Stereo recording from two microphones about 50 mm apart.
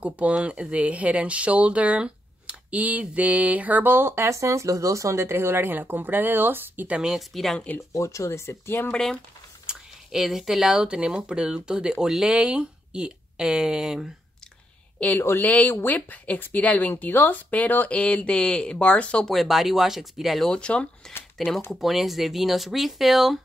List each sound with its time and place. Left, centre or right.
0.0 s speech: right
4.3 s speech: right
7.2 s speech: centre
7.9 s speech: left
9.7 s speech: centre
15.1 s speech: left
19.2 s speech: centre
20.5 s speech: left
21.4 s speech: centre